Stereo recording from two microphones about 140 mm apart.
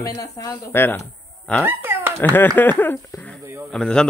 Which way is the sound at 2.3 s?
15° left (ahead or behind).